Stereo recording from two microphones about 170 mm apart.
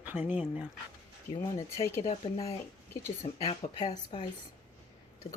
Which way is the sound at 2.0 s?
35° left (ahead or behind).